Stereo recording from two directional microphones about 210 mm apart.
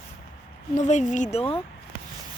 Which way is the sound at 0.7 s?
35° left (ahead or behind).